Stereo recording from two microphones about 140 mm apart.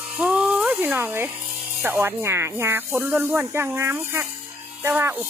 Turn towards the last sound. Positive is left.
turn(degrees=-15)  # may be behind; listen again after turning